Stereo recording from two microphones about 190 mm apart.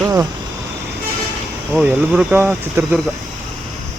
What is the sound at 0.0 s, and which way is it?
Vehicle, 15° right (ahead or behind).